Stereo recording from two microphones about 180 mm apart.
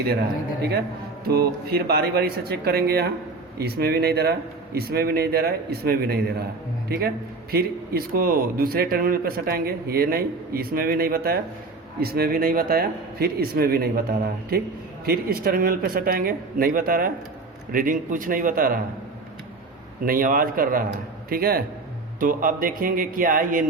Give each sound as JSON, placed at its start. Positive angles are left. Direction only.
{"t": 1.2, "sound": "speech", "side_deg": -60}
{"t": 20.1, "sound": "speech", "side_deg": -50}